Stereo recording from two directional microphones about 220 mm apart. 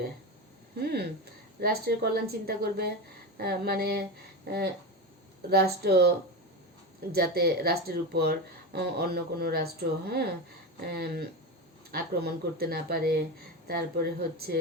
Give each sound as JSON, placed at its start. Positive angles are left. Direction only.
{"t": 0.8, "sound": "speech", "side_deg": -45}
{"t": 7.1, "sound": "speech", "side_deg": -45}